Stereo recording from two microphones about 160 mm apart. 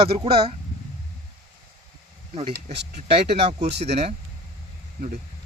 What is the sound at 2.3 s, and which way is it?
Speech, 35° right (ahead or behind).